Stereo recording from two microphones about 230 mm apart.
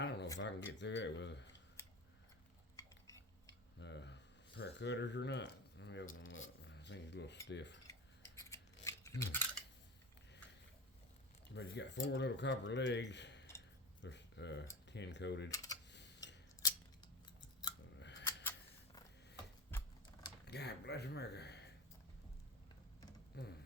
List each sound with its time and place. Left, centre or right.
0.0 s a sound: left
0.3 s speech: left
2.7 s cutlery: centre
3.8 s speech: left
6.1 s cutlery: left
7.4 s speech: left
8.4 s scissors: centre
11.5 s speech: left
15.5 s typing: centre
15.9 s typing: left
18.0 s a sound: left
20.4 s speech: left
23.3 s speech: left